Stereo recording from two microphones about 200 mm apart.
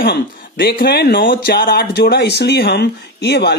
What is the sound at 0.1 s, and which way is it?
Speech, 50° left (ahead or behind).